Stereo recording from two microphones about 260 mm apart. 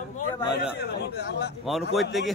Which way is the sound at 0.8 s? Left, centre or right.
Left.